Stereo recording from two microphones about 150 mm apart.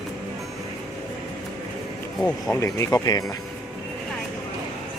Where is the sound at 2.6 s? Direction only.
20° left (ahead or behind).